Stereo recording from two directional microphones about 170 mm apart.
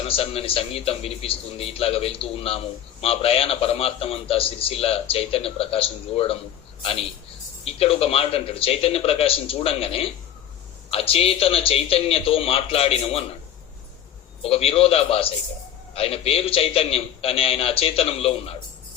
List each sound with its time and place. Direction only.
0.0 s a man's voice: 35° left (ahead or behind)
7.6 s a man's voice: 35° left (ahead or behind)
14.4 s a man's voice: 35° left (ahead or behind)